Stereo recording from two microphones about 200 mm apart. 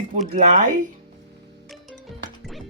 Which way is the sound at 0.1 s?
40° right (ahead or behind).